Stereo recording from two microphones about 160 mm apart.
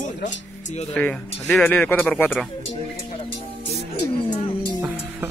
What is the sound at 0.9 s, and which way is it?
Speech, 10° left (ahead or behind).